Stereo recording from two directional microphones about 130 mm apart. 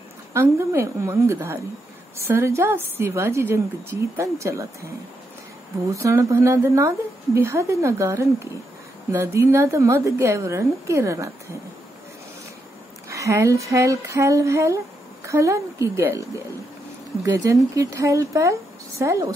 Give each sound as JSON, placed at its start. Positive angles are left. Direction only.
{"t": 0.3, "sound": "a woman's voice", "side_deg": -20}
{"t": 5.9, "sound": "a woman's voice", "side_deg": -25}
{"t": 13.1, "sound": "a woman's voice", "side_deg": -25}